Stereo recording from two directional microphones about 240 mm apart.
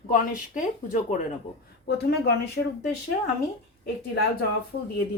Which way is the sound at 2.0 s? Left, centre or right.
Left.